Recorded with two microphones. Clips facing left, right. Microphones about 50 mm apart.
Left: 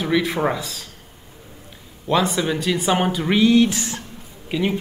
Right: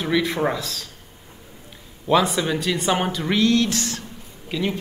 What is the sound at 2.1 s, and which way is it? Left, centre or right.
Speech, centre.